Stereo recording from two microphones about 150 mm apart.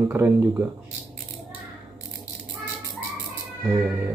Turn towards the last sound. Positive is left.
turn(degrees=-10)  # may be behind; listen again after turning